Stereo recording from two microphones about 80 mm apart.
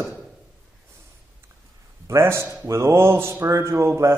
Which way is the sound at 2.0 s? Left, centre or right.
Right.